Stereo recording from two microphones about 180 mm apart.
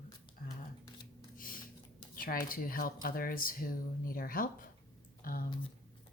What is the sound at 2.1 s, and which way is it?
Speech, 50° left (ahead or behind).